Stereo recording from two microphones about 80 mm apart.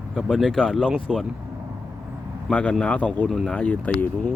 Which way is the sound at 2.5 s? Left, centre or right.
Centre.